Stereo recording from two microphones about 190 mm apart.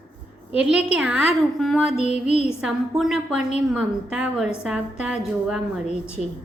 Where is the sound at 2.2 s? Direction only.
35° left (ahead or behind).